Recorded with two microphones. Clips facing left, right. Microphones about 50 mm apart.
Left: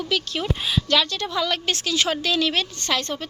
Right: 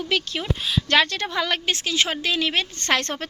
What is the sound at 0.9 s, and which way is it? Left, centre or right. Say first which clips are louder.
Speech: right 3 dB; right.